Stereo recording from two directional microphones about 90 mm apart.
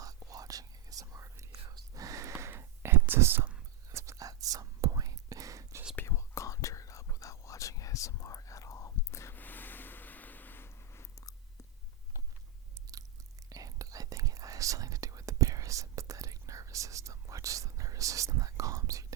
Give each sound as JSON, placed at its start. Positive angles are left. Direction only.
{"t": 0.0, "sound": "whispering", "side_deg": -40}
{"t": 3.1, "sound": "speech", "side_deg": -25}
{"t": 3.9, "sound": "whispering", "side_deg": -35}
{"t": 6.1, "sound": "whispering", "side_deg": 35}
{"t": 9.3, "sound": "a sound", "side_deg": 20}
{"t": 13.5, "sound": "whispering", "side_deg": -40}